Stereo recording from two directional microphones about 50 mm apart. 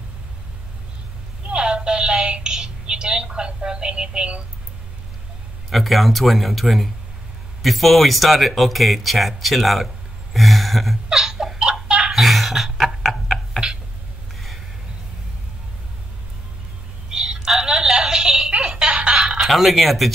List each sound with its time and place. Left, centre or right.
1.5 s synthetic singing: centre
5.7 s speech: centre
10.3 s a sound: centre
11.1 s laughter: centre
12.1 s a sound: centre
17.1 s telephone: centre
19.4 s speech: centre